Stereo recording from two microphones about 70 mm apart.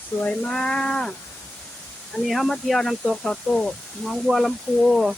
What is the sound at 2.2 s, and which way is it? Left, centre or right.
Speech, centre.